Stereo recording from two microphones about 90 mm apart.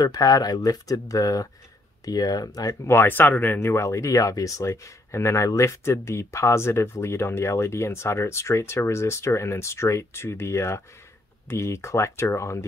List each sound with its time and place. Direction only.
0.0 s speech: 45° left (ahead or behind); by 12.6 s 30° left (ahead or behind)